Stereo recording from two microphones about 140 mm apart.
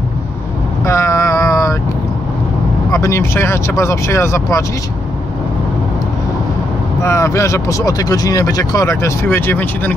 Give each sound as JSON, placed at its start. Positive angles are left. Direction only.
{"t": 0.8, "sound": "vehicle", "side_deg": 20}
{"t": 2.9, "sound": "speech", "side_deg": 20}
{"t": 7.0, "sound": "speech", "side_deg": 20}